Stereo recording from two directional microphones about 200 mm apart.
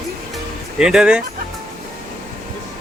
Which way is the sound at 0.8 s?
5° right (ahead or behind).